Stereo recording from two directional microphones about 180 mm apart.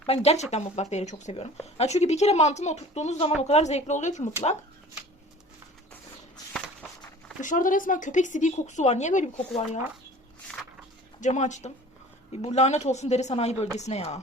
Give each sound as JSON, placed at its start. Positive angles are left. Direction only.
{"t": 0.0, "sound": "a woman's voice", "side_deg": 35}
{"t": 7.4, "sound": "speech", "side_deg": 50}
{"t": 11.2, "sound": "a woman's voice", "side_deg": 40}